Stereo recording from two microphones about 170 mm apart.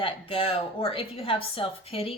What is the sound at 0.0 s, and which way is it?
Speech, 30° left (ahead or behind).